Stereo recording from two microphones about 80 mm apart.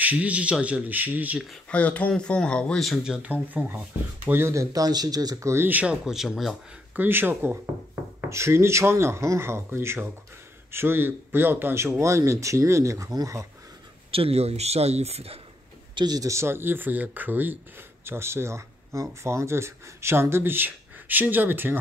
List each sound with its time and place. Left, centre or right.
0.0 s a man's voice: centre
1.7 s speech: centre
3.0 s a man's voice: centre
3.4 s speech: right
4.8 s speech: right
5.5 s speech: right
5.8 s speech: centre
7.0 s speech: right
15.9 s a sound: right
16.2 s speech: right